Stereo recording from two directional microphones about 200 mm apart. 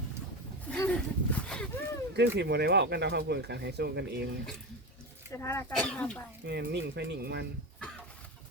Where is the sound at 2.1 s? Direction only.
55° right (ahead or behind).